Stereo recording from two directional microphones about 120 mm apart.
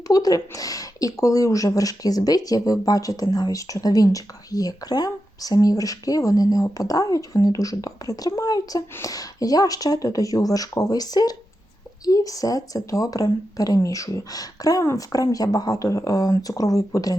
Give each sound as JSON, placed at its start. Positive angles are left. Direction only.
{"t": 0.1, "sound": "speech", "side_deg": 30}